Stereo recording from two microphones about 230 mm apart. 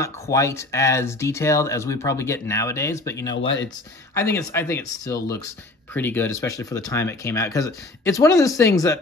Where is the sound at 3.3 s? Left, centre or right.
Left.